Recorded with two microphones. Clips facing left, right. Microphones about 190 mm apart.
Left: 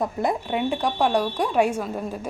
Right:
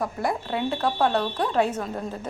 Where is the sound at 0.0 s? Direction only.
20° left (ahead or behind).